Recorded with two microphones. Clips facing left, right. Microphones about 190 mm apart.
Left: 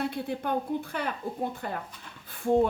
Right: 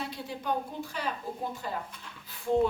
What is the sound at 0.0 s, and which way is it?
Speech, 55° left (ahead or behind).